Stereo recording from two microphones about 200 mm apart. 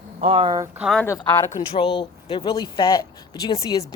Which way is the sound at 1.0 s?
15° left (ahead or behind).